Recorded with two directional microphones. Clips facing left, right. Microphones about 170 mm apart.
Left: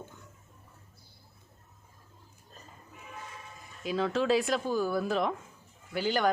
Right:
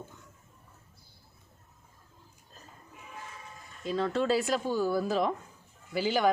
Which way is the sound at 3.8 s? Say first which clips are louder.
Even; centre (ahead or behind).